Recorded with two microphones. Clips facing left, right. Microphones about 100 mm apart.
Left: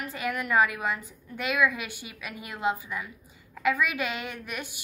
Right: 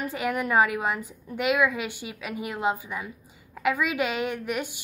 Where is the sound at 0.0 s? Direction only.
20° right (ahead or behind).